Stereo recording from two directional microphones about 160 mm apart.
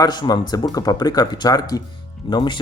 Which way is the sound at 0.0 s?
25° left (ahead or behind).